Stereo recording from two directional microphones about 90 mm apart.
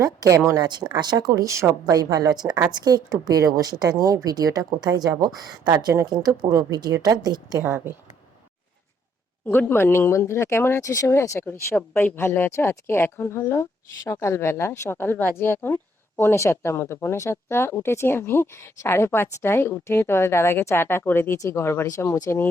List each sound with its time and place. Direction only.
0.0 s a woman's voice: 40° right (ahead or behind)
0.6 s speech: 55° right (ahead or behind); by 2.0 s 35° right (ahead or behind)
2.0 s speech: 45° right (ahead or behind)
7.6 s speech: 25° right (ahead or behind)
9.5 s speech: 25° left (ahead or behind)